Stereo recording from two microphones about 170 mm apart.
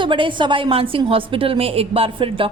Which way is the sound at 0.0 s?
30° right (ahead or behind).